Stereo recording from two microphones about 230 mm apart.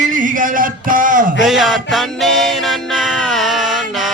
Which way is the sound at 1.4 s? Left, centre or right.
Centre.